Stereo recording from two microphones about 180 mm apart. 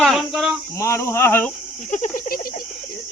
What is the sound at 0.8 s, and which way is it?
Speech, 15° left (ahead or behind).